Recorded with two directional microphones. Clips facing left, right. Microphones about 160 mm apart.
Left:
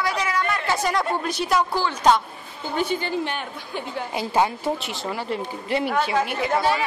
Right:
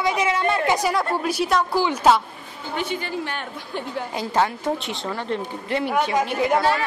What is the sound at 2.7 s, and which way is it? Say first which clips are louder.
Speech: left 3 dB; 40° left (ahead or behind).